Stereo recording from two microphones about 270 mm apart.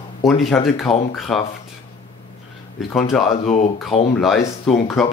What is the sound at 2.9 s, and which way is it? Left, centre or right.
Speech, centre.